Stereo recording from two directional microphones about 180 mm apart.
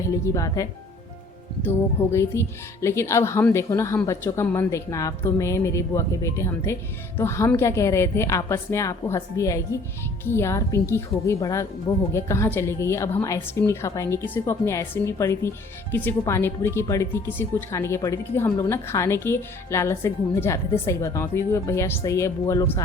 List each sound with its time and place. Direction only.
0.0 s speech: 15° left (ahead or behind)
2.1 s speech: 15° left (ahead or behind)